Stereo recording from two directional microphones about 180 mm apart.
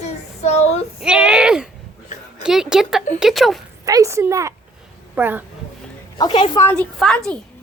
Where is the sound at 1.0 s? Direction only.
5° right (ahead or behind).